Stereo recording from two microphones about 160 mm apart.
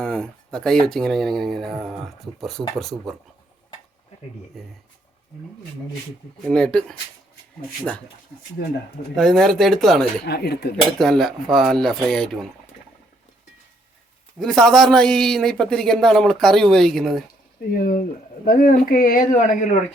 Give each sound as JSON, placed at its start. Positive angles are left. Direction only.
{"t": 0.0, "sound": "speech", "side_deg": 5}
{"t": 4.6, "sound": "speech", "side_deg": 0}
{"t": 6.5, "sound": "speech", "side_deg": 5}
{"t": 9.1, "sound": "speech", "side_deg": 0}
{"t": 10.2, "sound": "speech", "side_deg": 85}
{"t": 10.9, "sound": "speech", "side_deg": 0}
{"t": 14.3, "sound": "speech", "side_deg": 5}
{"t": 17.7, "sound": "speech", "side_deg": 60}